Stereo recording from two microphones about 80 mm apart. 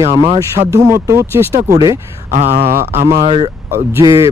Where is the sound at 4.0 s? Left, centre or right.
Right.